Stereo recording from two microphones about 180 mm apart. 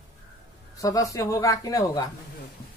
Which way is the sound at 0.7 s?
20° left (ahead or behind).